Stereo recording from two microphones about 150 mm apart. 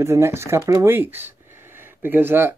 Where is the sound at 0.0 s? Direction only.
15° right (ahead or behind).